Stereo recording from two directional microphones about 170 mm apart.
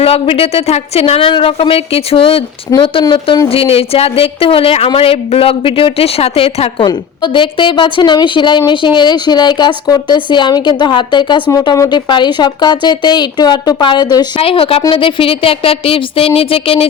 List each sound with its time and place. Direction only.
0.0 s a woman's voice: 35° left (ahead or behind)